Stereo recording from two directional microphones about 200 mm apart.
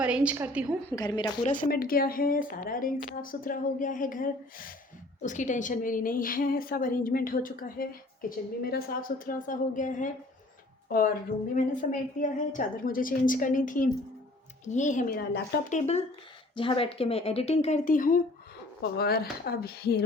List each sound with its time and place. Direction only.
0.0 s a woman's voice: 5° right (ahead or behind)
0.9 s speech: 20° left (ahead or behind)
1.5 s a woman's voice: 45° left (ahead or behind)
15.2 s speech: 55° left (ahead or behind)
16.6 s speech: 25° left (ahead or behind); by 20.0 s 55° left (ahead or behind)